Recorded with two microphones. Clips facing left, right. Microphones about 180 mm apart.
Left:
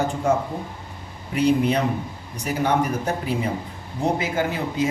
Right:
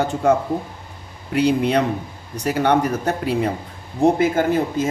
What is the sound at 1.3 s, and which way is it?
Speech, 65° right (ahead or behind).